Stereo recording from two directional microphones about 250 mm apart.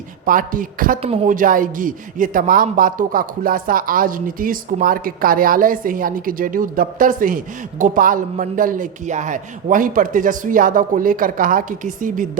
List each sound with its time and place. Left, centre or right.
0.3 s a woman's voice: right